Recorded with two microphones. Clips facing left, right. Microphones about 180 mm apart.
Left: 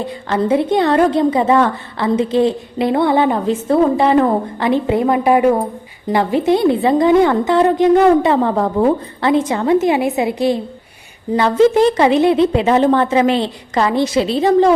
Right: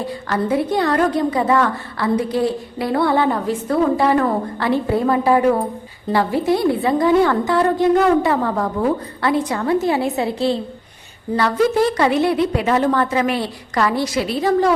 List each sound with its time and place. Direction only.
0.0 s a woman's voice: 20° left (ahead or behind)